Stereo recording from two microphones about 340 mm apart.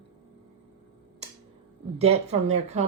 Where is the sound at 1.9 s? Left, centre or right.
Centre.